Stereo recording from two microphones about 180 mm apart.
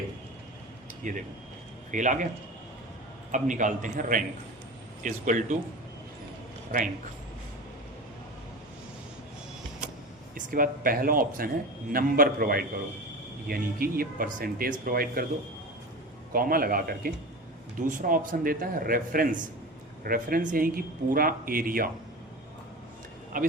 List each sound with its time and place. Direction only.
1.0 s a man's voice: 45° right (ahead or behind)
3.3 s a man's voice: 45° right (ahead or behind)
10.3 s a man's voice: 50° right (ahead or behind)
16.3 s a man's voice: 55° right (ahead or behind)
23.3 s speech: 50° right (ahead or behind)